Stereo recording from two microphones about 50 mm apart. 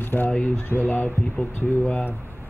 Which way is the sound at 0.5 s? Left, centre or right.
Left.